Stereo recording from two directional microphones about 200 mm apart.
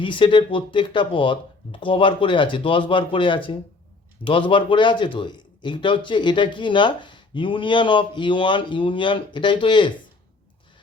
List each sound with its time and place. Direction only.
0.0 s speech: 25° left (ahead or behind)